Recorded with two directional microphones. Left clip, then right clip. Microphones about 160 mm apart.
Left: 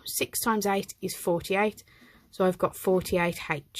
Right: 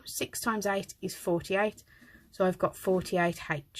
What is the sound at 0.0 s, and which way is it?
Speech, 40° left (ahead or behind).